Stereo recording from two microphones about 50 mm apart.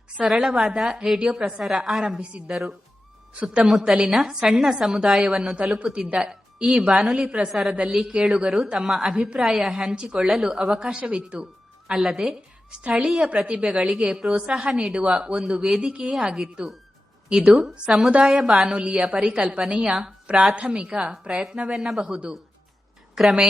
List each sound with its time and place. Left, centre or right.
0.3 s a woman's voice: centre
2.3 s a woman's voice: right
3.4 s a woman's voice: centre
7.7 s a woman's voice: right
8.2 s a woman's voice: centre
13.3 s a woman's voice: centre